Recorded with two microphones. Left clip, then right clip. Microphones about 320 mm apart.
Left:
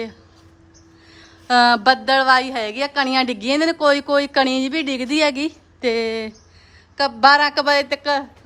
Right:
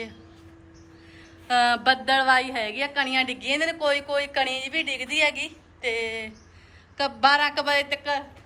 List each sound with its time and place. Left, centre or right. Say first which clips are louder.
1.5 s a woman's voice: left 7 dB; centre